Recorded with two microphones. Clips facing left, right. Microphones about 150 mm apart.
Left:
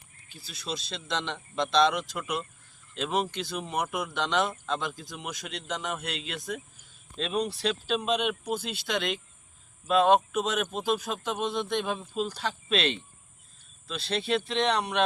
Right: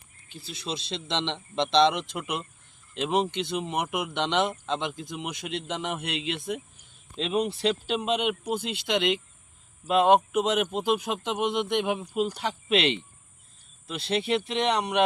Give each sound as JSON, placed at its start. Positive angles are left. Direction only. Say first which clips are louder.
{"t": 0.3, "sound": "speech", "louder": "right 2 dB", "side_deg": -25}